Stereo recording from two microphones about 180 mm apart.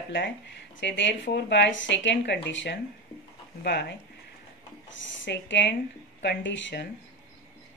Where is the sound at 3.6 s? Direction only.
65° left (ahead or behind).